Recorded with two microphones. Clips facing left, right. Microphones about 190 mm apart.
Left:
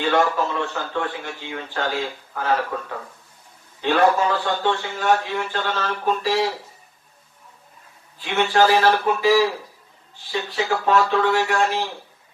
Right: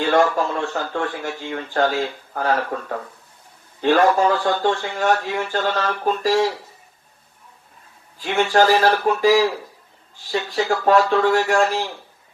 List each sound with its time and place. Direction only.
0.1 s a man's voice: 45° right (ahead or behind)
3.8 s a man's voice: 45° right (ahead or behind)
8.2 s a man's voice: 45° right (ahead or behind)
10.5 s a man's voice: 45° right (ahead or behind)